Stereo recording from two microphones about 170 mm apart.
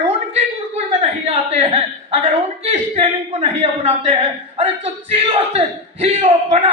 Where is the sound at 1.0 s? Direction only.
40° right (ahead or behind).